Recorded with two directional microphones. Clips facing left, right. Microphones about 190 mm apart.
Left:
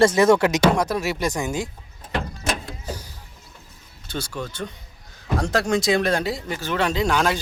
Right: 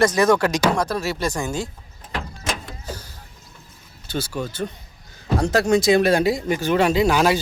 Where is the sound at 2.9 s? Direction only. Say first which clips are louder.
Left 1 dB; 15° left (ahead or behind).